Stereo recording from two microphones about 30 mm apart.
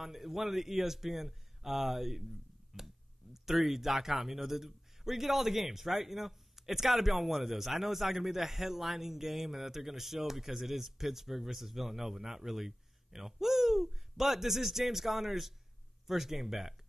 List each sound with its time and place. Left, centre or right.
0.0 s a man's voice: centre